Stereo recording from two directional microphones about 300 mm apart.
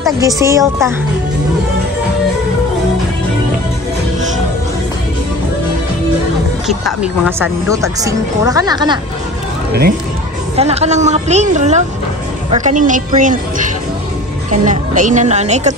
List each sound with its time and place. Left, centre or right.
0.3 s a woman's voice: centre
6.7 s a woman's voice: centre
9.7 s speech: right
10.5 s speech: right